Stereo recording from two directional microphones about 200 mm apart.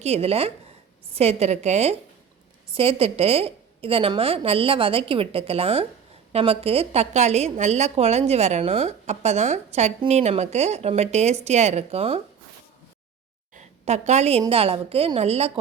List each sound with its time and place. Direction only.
0.0 s a woman's voice: 30° right (ahead or behind)
13.6 s a woman's voice: 35° right (ahead or behind)